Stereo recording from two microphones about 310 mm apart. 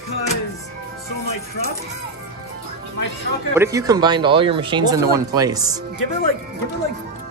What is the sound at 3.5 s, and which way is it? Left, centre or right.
Speech, centre.